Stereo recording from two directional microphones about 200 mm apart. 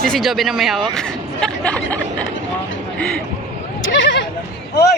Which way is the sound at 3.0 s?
5° left (ahead or behind).